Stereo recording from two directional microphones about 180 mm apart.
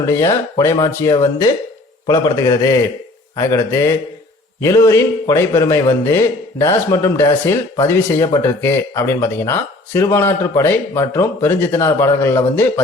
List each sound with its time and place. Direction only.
0.0 s a man's voice: 15° left (ahead or behind)